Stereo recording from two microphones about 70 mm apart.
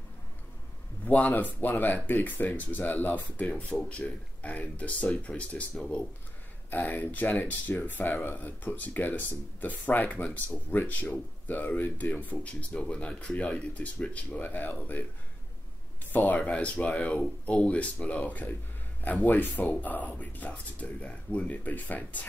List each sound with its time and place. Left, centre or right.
1.0 s speech: left
6.7 s speech: left
16.1 s speech: left